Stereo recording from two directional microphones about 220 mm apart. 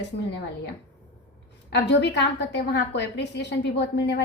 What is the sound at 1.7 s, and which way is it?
A woman's voice, 50° left (ahead or behind).